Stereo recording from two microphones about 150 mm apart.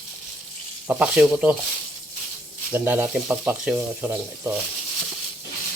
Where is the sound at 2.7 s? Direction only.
10° right (ahead or behind).